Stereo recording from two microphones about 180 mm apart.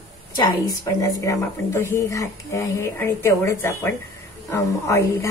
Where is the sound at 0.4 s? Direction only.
20° left (ahead or behind).